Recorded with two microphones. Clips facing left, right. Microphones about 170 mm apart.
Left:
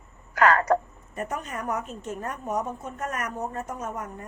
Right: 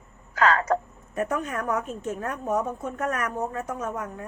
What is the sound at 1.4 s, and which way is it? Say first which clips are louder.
A woman's voice: right 3 dB; 50° right (ahead or behind).